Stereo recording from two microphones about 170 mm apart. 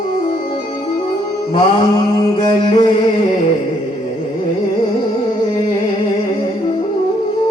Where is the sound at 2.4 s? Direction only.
25° left (ahead or behind).